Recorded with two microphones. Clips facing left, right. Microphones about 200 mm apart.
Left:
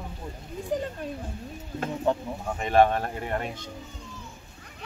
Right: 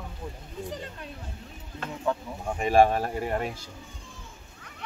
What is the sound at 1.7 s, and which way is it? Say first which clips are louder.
Speech: left 3 dB; 30° left (ahead or behind).